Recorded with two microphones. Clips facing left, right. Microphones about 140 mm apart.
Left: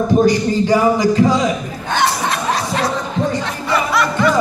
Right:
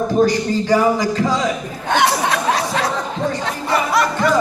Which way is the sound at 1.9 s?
65° right (ahead or behind).